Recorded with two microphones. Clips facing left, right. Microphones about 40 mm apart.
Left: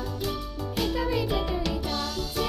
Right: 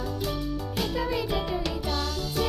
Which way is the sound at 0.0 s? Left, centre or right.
Centre.